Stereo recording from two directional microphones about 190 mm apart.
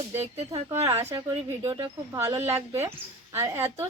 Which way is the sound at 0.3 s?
35° right (ahead or behind).